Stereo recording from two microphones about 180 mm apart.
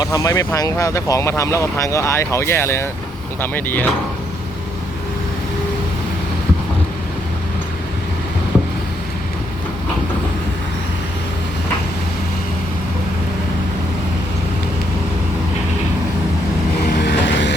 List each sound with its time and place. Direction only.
0.0 s speech: 20° left (ahead or behind)
17.0 s vehicle: 75° left (ahead or behind)